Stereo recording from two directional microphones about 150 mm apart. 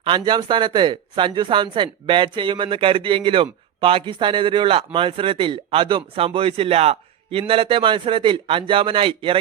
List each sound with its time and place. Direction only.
0.0 s speech: 30° right (ahead or behind)